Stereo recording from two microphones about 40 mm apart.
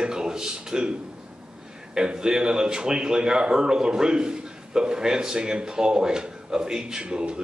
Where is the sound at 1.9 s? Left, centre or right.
Right.